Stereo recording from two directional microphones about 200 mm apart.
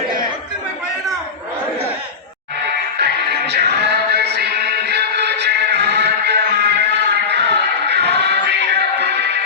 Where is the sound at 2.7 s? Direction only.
55° right (ahead or behind).